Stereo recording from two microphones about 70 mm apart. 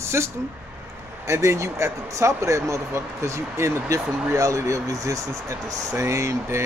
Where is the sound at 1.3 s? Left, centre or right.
Right.